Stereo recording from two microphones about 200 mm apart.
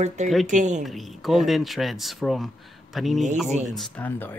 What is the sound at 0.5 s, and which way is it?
Speech, 35° right (ahead or behind).